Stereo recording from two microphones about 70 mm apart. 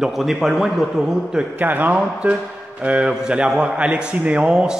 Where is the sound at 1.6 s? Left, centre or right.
Right.